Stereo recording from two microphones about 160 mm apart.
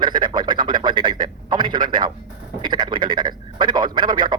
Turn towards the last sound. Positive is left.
turn(degrees=-30)  # may be behind; listen again after turning